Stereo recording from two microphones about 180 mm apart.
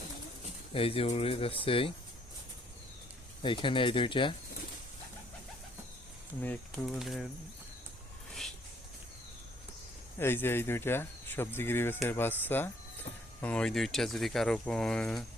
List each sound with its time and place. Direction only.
0.7 s speech: 30° left (ahead or behind)
3.4 s speech: 25° left (ahead or behind)
6.4 s speech: 5° left (ahead or behind)
10.2 s speech: 10° left (ahead or behind)